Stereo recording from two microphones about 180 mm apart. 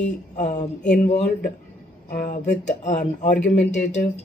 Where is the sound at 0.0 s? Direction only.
40° left (ahead or behind).